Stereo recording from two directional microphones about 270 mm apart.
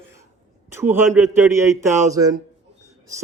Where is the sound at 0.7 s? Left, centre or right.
Centre.